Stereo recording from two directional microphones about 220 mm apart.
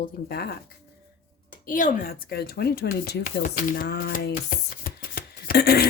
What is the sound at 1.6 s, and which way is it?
Speech, 35° left (ahead or behind).